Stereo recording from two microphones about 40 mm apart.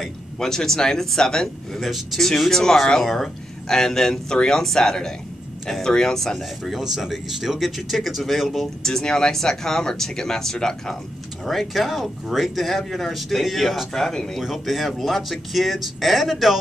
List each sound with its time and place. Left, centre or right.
0.0 s a man's voice: centre
1.9 s speech: centre
6.6 s speech: centre
8.8 s speech: centre
11.4 s speech: centre
14.4 s speech: centre